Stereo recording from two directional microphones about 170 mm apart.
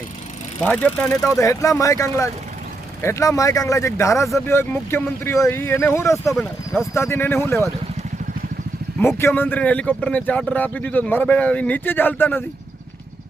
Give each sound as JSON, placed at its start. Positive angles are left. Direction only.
{"t": 0.6, "sound": "a man's voice", "side_deg": 10}
{"t": 1.4, "sound": "a man's voice", "side_deg": 20}
{"t": 9.0, "sound": "a man's voice", "side_deg": 15}